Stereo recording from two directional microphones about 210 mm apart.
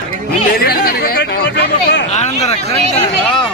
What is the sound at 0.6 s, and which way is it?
Speech, 45° left (ahead or behind).